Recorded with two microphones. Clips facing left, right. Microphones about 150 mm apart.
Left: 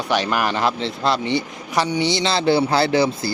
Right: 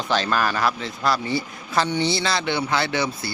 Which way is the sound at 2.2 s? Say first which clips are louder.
Left 6 dB; 30° left (ahead or behind).